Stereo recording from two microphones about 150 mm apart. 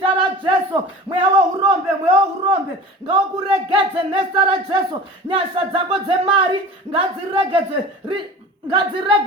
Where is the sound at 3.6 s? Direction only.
35° right (ahead or behind).